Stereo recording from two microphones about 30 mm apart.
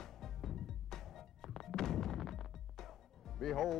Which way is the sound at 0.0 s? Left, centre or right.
Centre.